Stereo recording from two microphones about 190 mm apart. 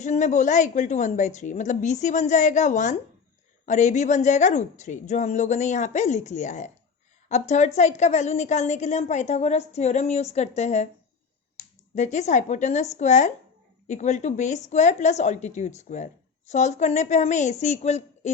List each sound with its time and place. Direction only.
0.0 s a woman's voice: 40° left (ahead or behind)
11.9 s a woman's voice: 40° left (ahead or behind)